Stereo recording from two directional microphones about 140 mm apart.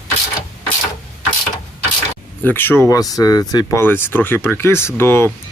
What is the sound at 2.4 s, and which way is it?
Speech, 15° left (ahead or behind).